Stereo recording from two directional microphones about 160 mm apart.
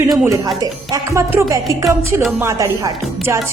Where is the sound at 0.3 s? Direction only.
25° right (ahead or behind).